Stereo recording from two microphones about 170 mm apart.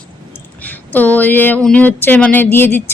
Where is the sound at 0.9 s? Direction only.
10° left (ahead or behind).